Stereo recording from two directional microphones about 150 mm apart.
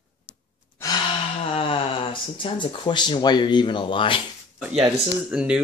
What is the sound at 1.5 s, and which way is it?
Speech, 35° left (ahead or behind).